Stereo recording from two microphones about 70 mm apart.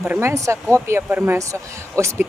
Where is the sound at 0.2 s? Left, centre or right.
Right.